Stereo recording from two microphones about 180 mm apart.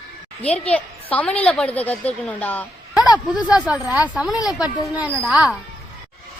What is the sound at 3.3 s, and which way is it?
Speech, 5° right (ahead or behind).